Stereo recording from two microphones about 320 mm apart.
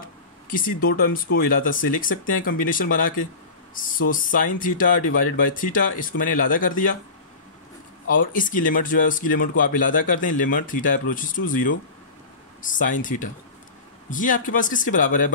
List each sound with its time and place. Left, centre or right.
0.5 s speech: left
4.1 s speech: left
8.1 s speech: left